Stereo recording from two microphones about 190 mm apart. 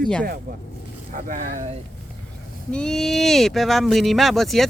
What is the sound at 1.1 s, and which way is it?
Speech, 45° right (ahead or behind).